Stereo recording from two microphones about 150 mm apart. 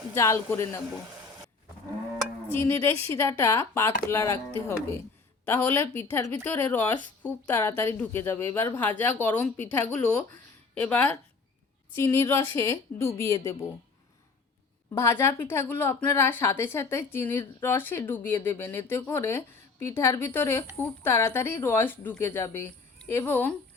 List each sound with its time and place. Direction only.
0.1 s a woman's voice: 20° left (ahead or behind)
2.5 s a woman's voice: 15° left (ahead or behind)
5.5 s a woman's voice: 15° left (ahead or behind)
11.9 s a woman's voice: 20° left (ahead or behind)
14.9 s a woman's voice: 15° left (ahead or behind)